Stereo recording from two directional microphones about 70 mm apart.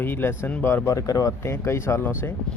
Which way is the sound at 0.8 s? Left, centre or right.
Left.